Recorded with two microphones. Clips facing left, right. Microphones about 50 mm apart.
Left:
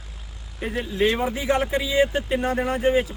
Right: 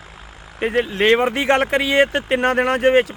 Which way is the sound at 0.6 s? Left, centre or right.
Right.